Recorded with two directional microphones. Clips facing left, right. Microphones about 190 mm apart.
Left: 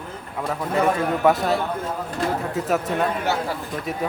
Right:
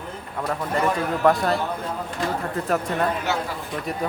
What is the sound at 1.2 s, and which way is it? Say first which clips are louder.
Speech: right 2 dB; centre (ahead or behind).